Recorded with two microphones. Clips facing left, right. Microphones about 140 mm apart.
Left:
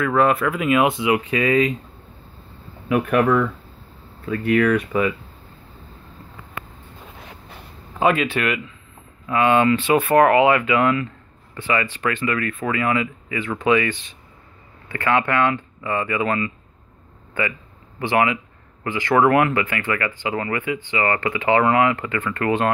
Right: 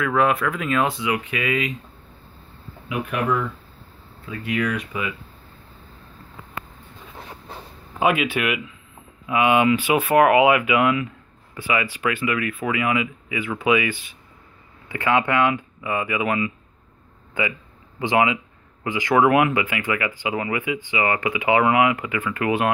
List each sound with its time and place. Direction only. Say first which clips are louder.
0.0 s speech: left 2 dB; centre (ahead or behind)
0.8 s speech: left 5 dB; 25° left (ahead or behind)
2.9 s speech: left 6 dB; 55° left (ahead or behind)
8.0 s speech: left 1 dB; 5° right (ahead or behind)